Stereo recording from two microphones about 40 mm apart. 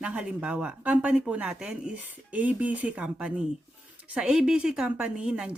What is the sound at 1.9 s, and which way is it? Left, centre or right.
Speech, right.